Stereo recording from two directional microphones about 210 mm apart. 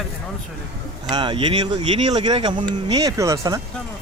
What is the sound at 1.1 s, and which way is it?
Speech, 20° right (ahead or behind).